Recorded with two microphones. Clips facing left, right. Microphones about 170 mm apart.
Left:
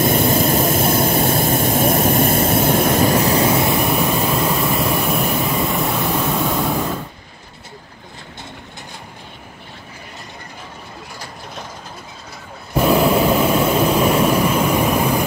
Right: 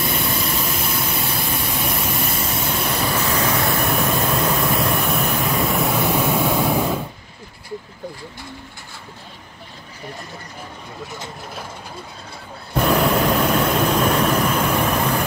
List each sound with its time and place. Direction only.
0.0 s vehicle: 45° left (ahead or behind); by 3.7 s 25° left (ahead or behind)
3.7 s vehicle: 5° left (ahead or behind)
12.7 s vehicle: centre (ahead or behind)